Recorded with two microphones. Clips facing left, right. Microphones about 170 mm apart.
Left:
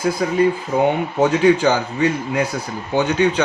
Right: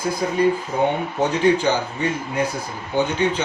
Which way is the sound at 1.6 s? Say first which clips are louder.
Left 4 dB; 90° left.